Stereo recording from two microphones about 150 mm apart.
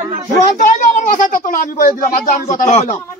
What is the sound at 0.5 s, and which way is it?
Speech, 60° left (ahead or behind).